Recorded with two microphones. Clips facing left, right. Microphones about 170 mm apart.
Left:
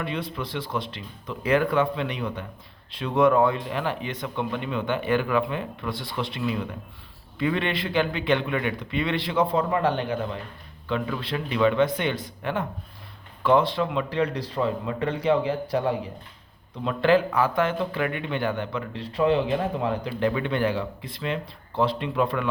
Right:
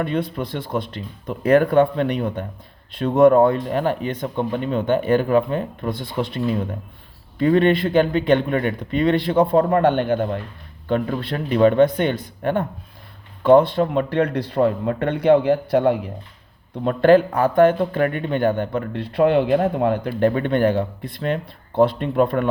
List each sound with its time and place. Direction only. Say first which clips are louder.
0.0 s speech: right 7 dB; 50° right (ahead or behind)
10.8 s a man's voice: right 6 dB; 45° right (ahead or behind); by 16.0 s 65° right (ahead or behind)
16.8 s speech: right 7 dB; 50° right (ahead or behind)